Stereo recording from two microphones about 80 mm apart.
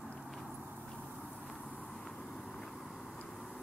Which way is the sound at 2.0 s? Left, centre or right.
Centre.